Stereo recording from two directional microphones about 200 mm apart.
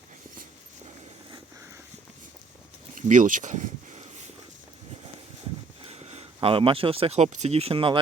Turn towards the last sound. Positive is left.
turn(degrees=-25)  # may be behind; listen again after turning